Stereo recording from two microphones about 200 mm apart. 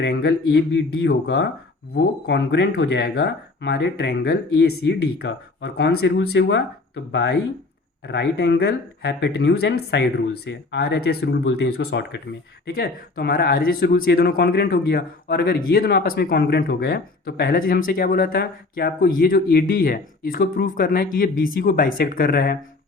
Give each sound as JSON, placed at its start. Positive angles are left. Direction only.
{"t": 0.0, "sound": "speech", "side_deg": 55}
{"t": 4.7, "sound": "speech", "side_deg": 65}